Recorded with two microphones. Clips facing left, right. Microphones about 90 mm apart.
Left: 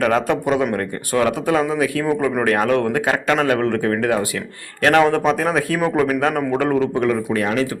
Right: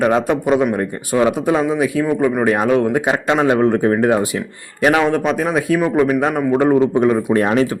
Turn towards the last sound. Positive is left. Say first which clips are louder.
# right 5 dB
turn(degrees=-35)  # may be behind; listen again after turning